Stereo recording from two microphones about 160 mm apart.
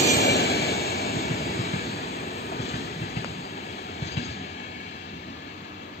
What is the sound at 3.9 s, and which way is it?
Train, 40° left (ahead or behind).